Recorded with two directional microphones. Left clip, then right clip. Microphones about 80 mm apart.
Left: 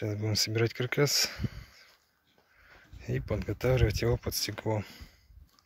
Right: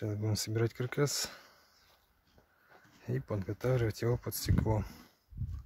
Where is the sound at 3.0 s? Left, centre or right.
Centre.